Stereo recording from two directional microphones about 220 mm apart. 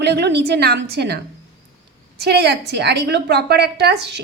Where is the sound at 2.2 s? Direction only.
50° right (ahead or behind).